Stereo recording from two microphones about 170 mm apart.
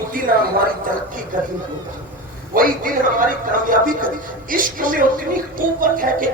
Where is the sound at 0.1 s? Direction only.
55° right (ahead or behind).